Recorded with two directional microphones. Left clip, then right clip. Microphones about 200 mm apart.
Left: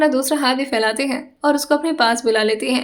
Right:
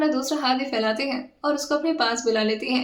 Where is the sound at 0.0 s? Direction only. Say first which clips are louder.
Left 7 dB; 40° left (ahead or behind).